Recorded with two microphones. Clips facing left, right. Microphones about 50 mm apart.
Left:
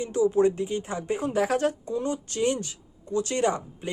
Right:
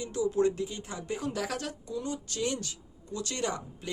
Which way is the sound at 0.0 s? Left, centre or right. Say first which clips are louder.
Left 6 dB; left.